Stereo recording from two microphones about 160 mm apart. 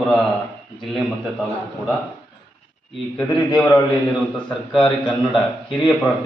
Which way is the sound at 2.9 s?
5° left (ahead or behind).